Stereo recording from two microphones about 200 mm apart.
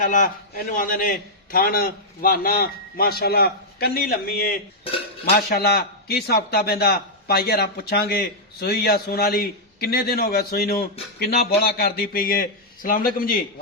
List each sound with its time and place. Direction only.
0.0 s a man's voice: 40° left (ahead or behind)